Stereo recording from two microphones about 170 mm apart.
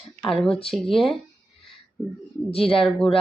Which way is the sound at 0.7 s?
Centre (ahead or behind).